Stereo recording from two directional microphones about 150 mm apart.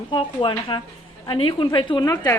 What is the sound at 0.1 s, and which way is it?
A woman's voice, 35° left (ahead or behind).